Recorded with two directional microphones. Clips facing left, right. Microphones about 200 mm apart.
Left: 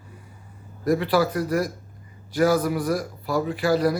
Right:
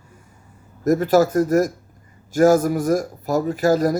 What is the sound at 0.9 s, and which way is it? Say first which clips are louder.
A man's voice: right 5 dB; 45° right (ahead or behind).